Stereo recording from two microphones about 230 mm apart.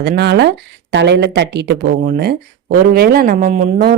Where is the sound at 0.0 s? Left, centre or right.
Right.